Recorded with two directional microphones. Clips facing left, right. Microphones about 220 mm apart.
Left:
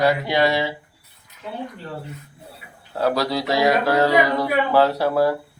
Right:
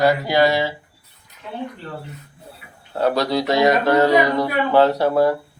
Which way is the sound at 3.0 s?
Centre (ahead or behind).